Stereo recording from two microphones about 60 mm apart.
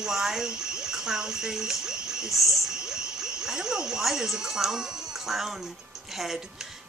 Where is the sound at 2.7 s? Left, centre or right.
Centre.